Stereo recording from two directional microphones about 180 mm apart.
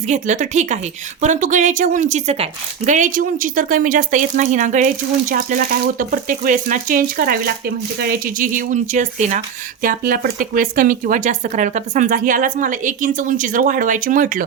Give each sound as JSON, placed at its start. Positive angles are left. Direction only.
{"t": 0.1, "sound": "speech", "side_deg": -40}